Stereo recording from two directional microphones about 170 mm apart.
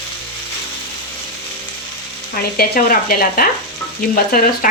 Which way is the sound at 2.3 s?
60° left (ahead or behind).